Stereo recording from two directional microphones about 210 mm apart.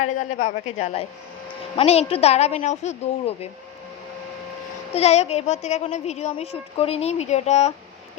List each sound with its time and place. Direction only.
0.0 s speech: 35° left (ahead or behind)
4.9 s speech: 30° left (ahead or behind)